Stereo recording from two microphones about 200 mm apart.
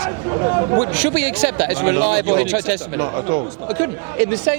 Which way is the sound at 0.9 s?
10° right (ahead or behind).